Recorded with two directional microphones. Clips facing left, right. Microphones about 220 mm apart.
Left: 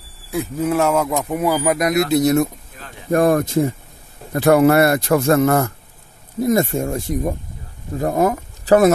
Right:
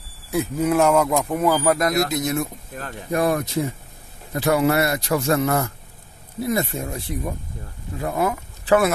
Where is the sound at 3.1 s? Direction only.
50° left (ahead or behind).